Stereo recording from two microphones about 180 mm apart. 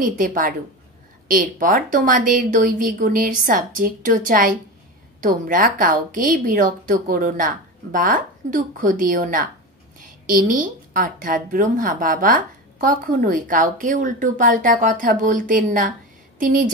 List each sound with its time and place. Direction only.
0.2 s a woman's voice: 50° right (ahead or behind)